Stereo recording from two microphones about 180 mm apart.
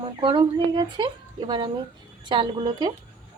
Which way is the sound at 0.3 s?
25° right (ahead or behind).